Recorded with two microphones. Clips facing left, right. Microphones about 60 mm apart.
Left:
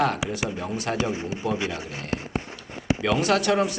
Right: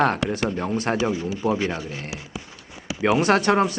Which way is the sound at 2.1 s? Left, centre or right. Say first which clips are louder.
Left 6 dB; left.